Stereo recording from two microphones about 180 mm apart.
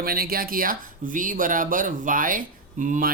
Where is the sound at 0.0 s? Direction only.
55° right (ahead or behind).